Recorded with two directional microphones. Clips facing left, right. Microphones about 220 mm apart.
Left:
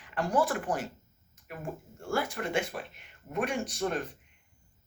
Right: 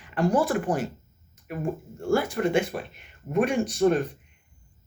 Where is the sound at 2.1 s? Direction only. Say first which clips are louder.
Right 8 dB; 25° right (ahead or behind).